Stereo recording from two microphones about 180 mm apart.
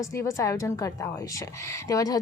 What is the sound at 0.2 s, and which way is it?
A woman's voice, 15° left (ahead or behind).